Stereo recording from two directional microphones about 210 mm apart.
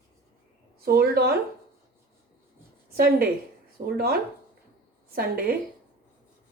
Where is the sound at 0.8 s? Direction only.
45° right (ahead or behind).